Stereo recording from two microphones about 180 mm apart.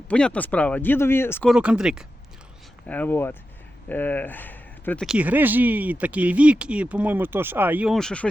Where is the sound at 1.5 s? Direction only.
5° right (ahead or behind).